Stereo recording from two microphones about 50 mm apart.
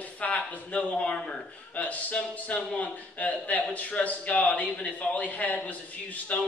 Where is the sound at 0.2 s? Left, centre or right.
Left.